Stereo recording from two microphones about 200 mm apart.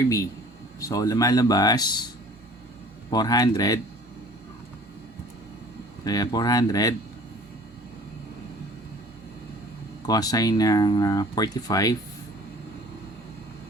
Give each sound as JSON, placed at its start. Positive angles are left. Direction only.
{"t": 0.8, "sound": "speech", "side_deg": 15}
{"t": 3.1, "sound": "speech", "side_deg": 20}
{"t": 6.1, "sound": "speech", "side_deg": 20}
{"t": 10.1, "sound": "speech", "side_deg": 20}